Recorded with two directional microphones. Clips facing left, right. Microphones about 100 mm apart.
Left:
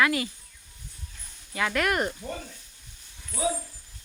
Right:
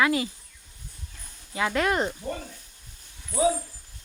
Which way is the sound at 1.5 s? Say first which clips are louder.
Right 2 dB; 25° right (ahead or behind).